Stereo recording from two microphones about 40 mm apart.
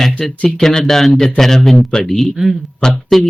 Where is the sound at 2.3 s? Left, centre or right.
Centre.